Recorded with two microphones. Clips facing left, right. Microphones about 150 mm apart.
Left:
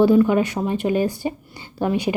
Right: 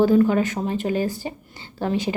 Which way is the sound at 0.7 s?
15° left (ahead or behind).